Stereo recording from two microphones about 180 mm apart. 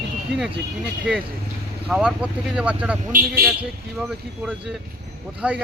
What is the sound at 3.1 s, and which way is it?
Speech, 55° right (ahead or behind).